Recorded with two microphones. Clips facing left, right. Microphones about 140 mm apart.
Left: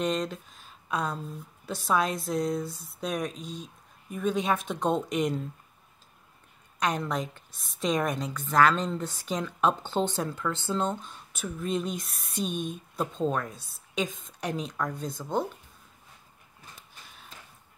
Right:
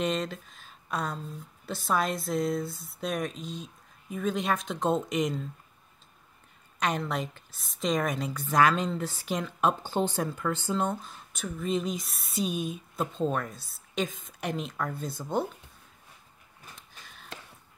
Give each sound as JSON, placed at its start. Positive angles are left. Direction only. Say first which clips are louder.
{"t": 0.0, "sound": "a woman's voice", "louder": "left 1 dB", "side_deg": 0}
{"t": 7.0, "sound": "a woman's voice", "louder": "left 1 dB", "side_deg": 0}
{"t": 17.3, "sound": "a sound", "louder": "right 8 dB", "side_deg": -75}